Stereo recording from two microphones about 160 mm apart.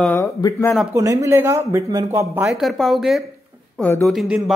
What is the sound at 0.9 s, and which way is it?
Speech, 20° right (ahead or behind).